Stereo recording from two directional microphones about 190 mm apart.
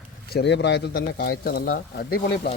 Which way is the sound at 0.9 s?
50° left (ahead or behind).